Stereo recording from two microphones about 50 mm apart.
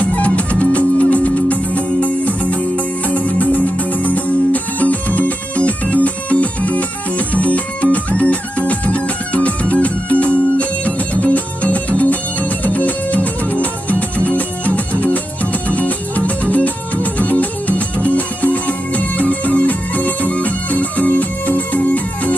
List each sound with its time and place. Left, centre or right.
0.0 s music: left